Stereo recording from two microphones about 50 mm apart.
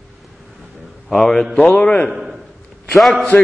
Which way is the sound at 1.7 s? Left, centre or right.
Centre.